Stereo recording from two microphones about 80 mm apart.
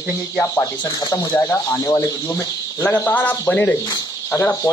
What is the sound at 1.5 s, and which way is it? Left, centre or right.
Speech, left.